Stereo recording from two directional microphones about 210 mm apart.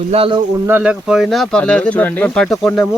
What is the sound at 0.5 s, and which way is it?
Speech, 10° right (ahead or behind).